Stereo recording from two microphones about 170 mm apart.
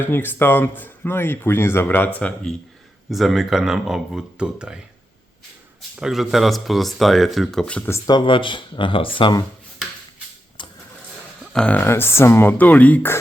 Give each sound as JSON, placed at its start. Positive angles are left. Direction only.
{"t": 0.0, "sound": "speech", "side_deg": 10}
{"t": 6.0, "sound": "speech", "side_deg": 0}
{"t": 10.6, "sound": "a sound", "side_deg": 30}
{"t": 11.5, "sound": "speech", "side_deg": 5}